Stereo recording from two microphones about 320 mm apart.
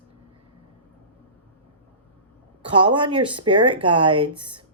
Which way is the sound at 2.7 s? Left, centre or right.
Centre.